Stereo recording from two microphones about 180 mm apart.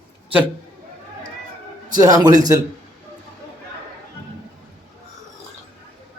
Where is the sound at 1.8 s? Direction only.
20° right (ahead or behind).